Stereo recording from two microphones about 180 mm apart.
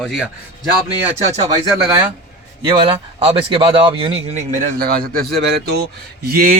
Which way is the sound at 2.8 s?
30° right (ahead or behind).